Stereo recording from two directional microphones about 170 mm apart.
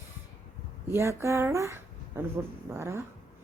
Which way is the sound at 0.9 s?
15° right (ahead or behind).